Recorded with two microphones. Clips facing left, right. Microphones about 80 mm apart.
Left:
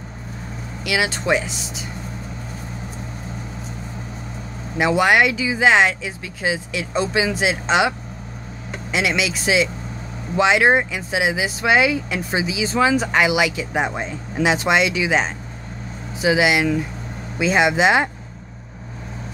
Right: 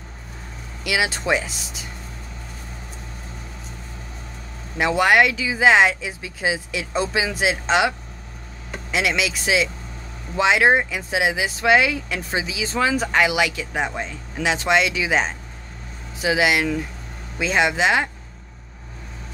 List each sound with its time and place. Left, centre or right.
0.8 s speech: centre
4.7 s speech: centre
8.9 s speech: centre